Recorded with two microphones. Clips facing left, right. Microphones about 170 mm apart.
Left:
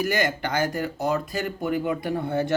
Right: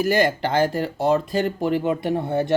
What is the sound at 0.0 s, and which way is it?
Speech, 30° right (ahead or behind).